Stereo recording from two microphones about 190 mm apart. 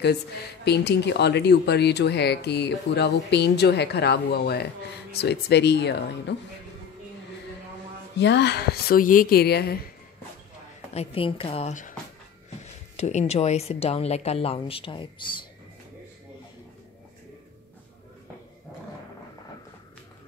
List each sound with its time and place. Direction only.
0.7 s speech: 60° left (ahead or behind)
8.2 s speech: 65° left (ahead or behind)
10.9 s speech: 30° left (ahead or behind)
12.9 s speech: 35° left (ahead or behind)